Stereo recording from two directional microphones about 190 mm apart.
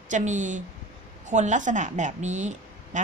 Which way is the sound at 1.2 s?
40° right (ahead or behind).